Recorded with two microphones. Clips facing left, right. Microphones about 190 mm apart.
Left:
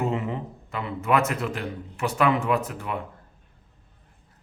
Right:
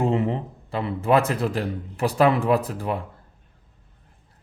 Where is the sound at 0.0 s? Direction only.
30° right (ahead or behind).